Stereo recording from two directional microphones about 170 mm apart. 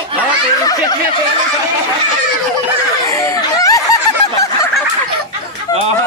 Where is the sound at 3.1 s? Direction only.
20° left (ahead or behind).